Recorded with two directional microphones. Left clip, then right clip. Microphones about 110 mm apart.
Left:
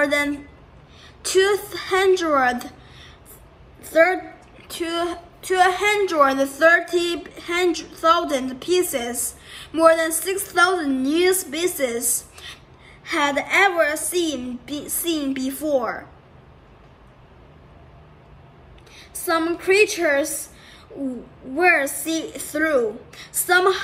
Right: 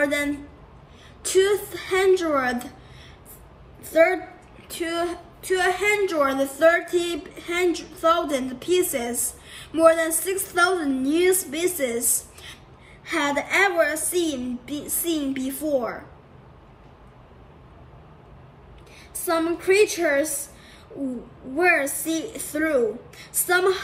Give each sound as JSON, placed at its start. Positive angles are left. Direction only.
{"t": 0.0, "sound": "a woman's voice", "side_deg": 20}
{"t": 3.8, "sound": "a woman's voice", "side_deg": 20}
{"t": 5.8, "sound": "a woman's voice", "side_deg": 30}
{"t": 6.9, "sound": "a woman's voice", "side_deg": 15}
{"t": 13.0, "sound": "a woman's voice", "side_deg": 15}
{"t": 18.9, "sound": "a woman's voice", "side_deg": 15}